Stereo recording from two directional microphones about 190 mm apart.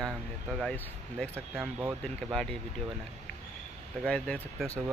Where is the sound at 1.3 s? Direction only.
10° right (ahead or behind).